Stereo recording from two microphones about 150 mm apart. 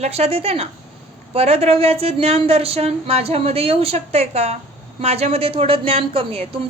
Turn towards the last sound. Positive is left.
turn(degrees=-40)  # may be behind; listen again after turning